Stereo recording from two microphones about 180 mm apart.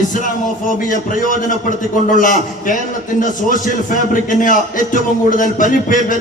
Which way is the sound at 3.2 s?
45° left (ahead or behind).